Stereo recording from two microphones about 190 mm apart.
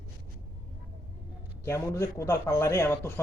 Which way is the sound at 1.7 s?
15° left (ahead or behind).